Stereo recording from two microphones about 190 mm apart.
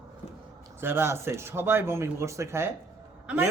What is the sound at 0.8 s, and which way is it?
A woman's voice, 10° right (ahead or behind).